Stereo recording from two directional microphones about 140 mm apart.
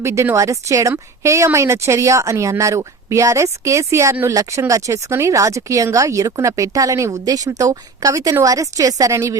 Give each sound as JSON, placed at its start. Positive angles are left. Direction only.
{"t": 0.0, "sound": "speech", "side_deg": -20}